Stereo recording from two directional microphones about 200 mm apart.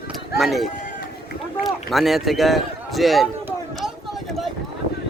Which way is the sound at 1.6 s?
Centre (ahead or behind).